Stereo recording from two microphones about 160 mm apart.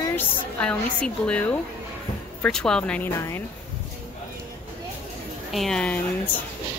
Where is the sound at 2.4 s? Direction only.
5° left (ahead or behind).